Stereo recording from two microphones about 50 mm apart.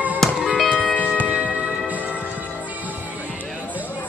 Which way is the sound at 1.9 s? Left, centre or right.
Right.